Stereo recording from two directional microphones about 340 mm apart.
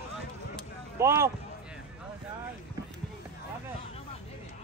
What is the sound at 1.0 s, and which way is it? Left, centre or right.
Speech, centre.